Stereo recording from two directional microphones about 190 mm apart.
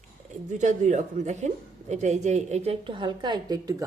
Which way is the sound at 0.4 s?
40° right (ahead or behind).